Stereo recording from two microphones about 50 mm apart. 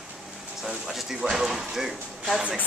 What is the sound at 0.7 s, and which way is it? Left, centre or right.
Speech, centre.